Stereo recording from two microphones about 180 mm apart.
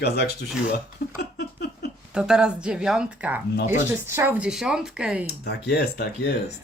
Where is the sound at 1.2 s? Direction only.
65° left (ahead or behind).